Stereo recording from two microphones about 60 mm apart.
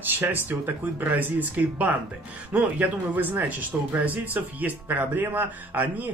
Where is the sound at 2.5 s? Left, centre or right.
Centre.